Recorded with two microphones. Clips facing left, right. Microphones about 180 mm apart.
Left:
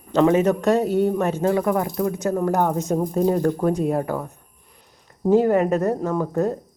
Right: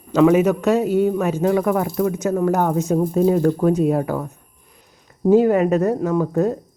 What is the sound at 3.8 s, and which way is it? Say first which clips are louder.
Speech: right 3 dB; 10° right (ahead or behind).